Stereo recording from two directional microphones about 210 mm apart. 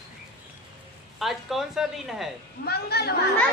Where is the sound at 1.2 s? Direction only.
Centre (ahead or behind).